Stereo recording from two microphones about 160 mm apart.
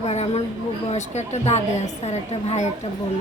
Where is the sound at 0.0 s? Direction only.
40° left (ahead or behind).